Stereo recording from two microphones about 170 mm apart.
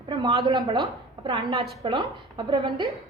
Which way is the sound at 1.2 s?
30° right (ahead or behind).